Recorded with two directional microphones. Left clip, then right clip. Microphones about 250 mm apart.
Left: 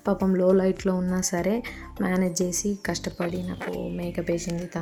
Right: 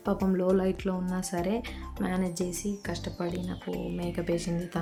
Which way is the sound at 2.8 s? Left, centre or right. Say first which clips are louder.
Left 6 dB; left.